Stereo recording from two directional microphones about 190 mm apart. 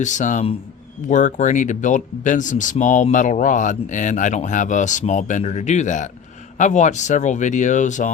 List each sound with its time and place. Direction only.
0.0 s speech: 40° left (ahead or behind)